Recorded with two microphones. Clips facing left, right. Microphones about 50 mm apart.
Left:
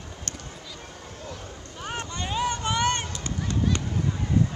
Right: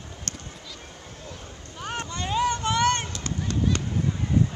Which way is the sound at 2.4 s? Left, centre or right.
Left.